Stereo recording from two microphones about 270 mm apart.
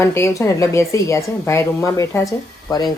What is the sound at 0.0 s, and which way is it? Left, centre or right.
Speech, centre.